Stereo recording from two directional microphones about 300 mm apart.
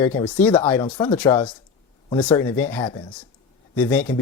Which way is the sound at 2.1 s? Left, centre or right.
Centre.